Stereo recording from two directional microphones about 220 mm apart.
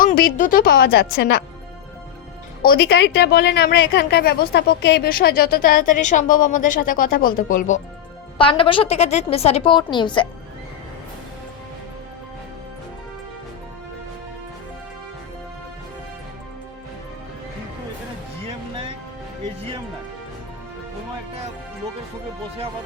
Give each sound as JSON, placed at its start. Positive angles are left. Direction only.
{"t": 0.0, "sound": "a woman's voice", "side_deg": 40}
{"t": 2.6, "sound": "a woman's voice", "side_deg": 45}
{"t": 8.4, "sound": "a woman's voice", "side_deg": 25}